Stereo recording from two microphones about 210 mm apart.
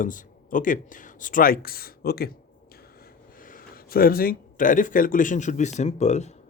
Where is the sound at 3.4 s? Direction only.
40° left (ahead or behind).